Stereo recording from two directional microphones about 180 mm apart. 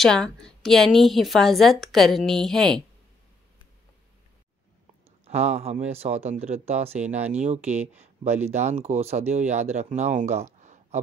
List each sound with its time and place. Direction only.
0.0 s a woman's voice: centre (ahead or behind)
5.2 s speech: 35° right (ahead or behind)